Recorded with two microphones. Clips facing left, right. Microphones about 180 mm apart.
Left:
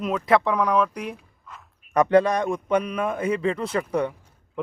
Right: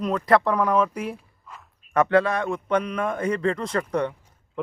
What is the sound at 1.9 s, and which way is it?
Speech, 15° left (ahead or behind).